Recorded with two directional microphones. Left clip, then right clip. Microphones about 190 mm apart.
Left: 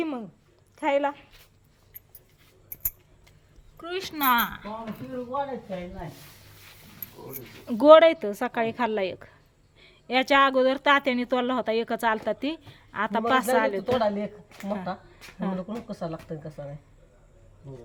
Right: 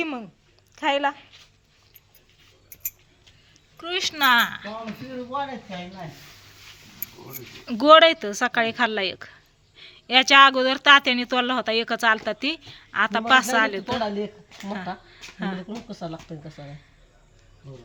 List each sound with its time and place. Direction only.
0.0 s a woman's voice: 5° left (ahead or behind)
3.8 s speech: 5° left (ahead or behind)
7.7 s a woman's voice: 15° left (ahead or behind)